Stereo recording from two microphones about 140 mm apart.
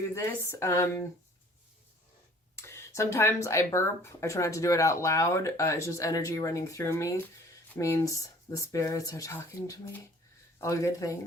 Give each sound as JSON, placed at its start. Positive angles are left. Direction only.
{"t": 0.1, "sound": "speech", "side_deg": 20}
{"t": 2.6, "sound": "speech", "side_deg": 20}